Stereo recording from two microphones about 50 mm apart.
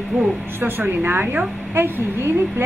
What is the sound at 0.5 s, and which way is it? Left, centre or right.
A woman's voice, right.